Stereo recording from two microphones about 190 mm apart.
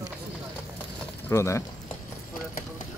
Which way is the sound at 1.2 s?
15° left (ahead or behind).